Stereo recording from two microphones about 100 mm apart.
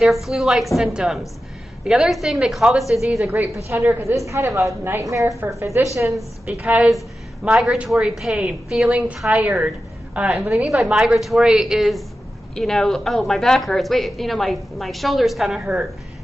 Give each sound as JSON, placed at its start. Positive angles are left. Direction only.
{"t": 0.0, "sound": "a woman's voice", "side_deg": -5}
{"t": 3.3, "sound": "a woman's voice", "side_deg": -25}
{"t": 6.4, "sound": "a woman's voice", "side_deg": -15}